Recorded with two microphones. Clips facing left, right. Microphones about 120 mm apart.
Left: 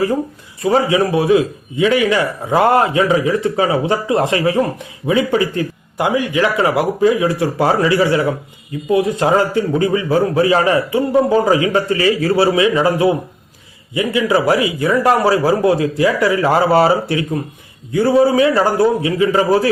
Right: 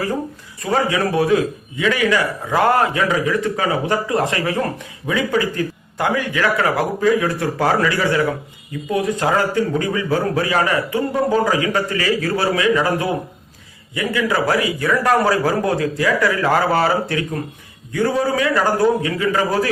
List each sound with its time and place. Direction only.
0.6 s a man's voice: 20° left (ahead or behind)
12.3 s a man's voice: 20° left (ahead or behind)